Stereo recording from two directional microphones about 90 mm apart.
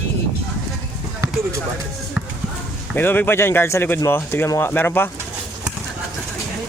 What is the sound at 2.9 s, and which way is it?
Speech, 25° left (ahead or behind).